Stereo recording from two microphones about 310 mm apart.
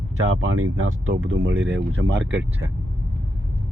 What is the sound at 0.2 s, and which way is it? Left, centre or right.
Speech, right.